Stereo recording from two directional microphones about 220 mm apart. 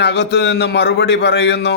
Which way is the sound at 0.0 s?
50° left (ahead or behind).